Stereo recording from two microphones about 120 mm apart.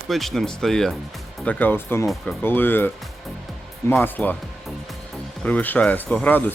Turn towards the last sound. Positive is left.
turn(degrees=15)  # may be behind; listen again after turning